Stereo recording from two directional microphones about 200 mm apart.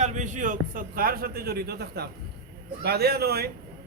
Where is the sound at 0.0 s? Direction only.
35° right (ahead or behind); by 3.5 s 50° right (ahead or behind).